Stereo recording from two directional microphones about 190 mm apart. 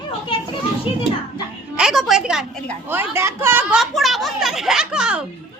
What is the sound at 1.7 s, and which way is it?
A woman's voice, centre (ahead or behind).